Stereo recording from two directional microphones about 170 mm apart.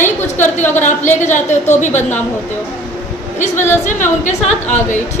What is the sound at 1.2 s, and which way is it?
Speech, 45° left (ahead or behind).